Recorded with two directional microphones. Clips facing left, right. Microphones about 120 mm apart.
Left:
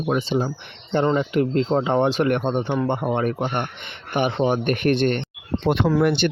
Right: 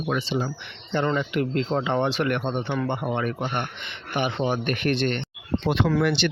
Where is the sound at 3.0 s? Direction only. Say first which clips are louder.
Left 4 dB; 45° left (ahead or behind).